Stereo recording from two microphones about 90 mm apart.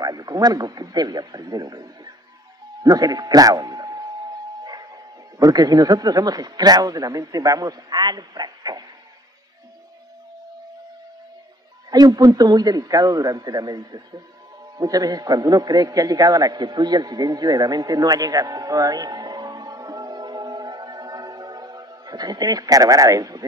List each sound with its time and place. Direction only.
0.0 s a man's voice: 45° right (ahead or behind)
11.9 s a man's voice: 45° right (ahead or behind)